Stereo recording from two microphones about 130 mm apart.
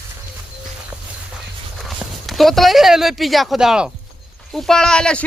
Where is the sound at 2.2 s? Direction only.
Centre (ahead or behind).